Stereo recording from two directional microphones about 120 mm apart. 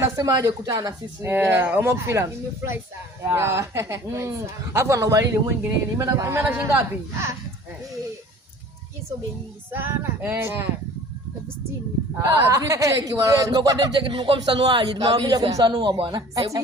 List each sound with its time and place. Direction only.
0.0 s speech: 30° right (ahead or behind)
1.3 s speech: 20° right (ahead or behind)
9.7 s speech: 20° right (ahead or behind)
12.1 s speech: 25° right (ahead or behind)